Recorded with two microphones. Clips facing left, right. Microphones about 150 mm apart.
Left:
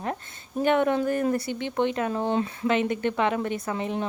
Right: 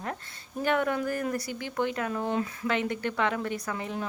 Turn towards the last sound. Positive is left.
turn(degrees=25)  # may be behind; listen again after turning